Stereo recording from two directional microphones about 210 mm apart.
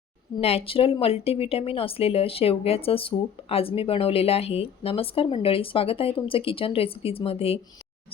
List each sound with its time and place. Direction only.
0.3 s speech: 25° left (ahead or behind)